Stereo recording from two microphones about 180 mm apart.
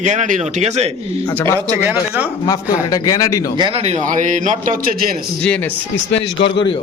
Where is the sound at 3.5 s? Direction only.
30° right (ahead or behind); by 5.2 s 50° right (ahead or behind).